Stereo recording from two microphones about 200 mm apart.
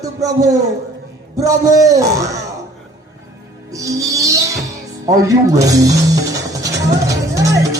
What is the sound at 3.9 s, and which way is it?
Speech, 15° right (ahead or behind).